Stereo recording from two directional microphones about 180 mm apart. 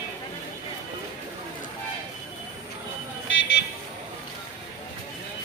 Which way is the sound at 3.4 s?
90° left.